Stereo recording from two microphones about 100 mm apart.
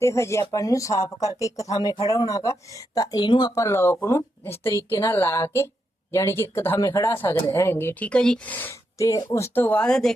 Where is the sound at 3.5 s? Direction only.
30° left (ahead or behind).